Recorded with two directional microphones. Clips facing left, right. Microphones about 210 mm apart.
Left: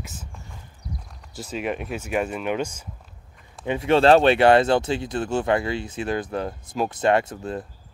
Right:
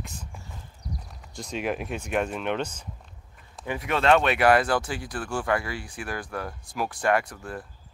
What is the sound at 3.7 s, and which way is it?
Speech, 30° left (ahead or behind).